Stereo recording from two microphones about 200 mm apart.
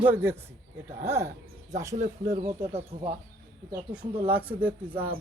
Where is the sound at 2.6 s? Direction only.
30° right (ahead or behind).